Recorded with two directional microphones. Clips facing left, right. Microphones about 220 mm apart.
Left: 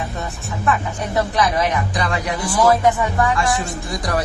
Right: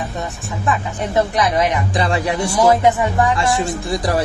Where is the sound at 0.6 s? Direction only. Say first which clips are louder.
Even; 20° right (ahead or behind).